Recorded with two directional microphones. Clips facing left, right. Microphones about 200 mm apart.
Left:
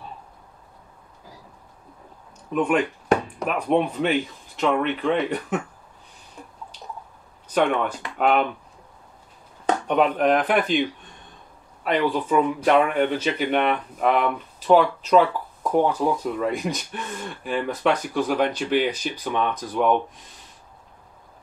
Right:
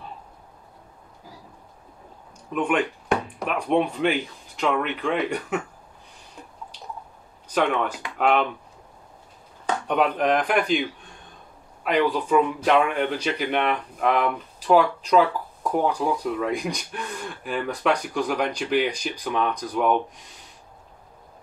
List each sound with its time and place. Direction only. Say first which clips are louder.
2.5 s speech: left 2 dB; 5° left (ahead or behind)
7.5 s speech: left 2 dB; centre (ahead or behind)
9.8 s speech: left 2 dB; centre (ahead or behind)
11.8 s speech: even; 5° left (ahead or behind)